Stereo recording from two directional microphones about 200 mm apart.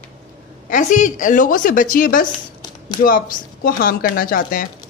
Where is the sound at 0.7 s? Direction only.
40° left (ahead or behind).